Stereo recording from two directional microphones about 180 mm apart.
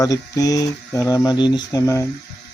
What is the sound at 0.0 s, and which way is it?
Speech, 20° left (ahead or behind).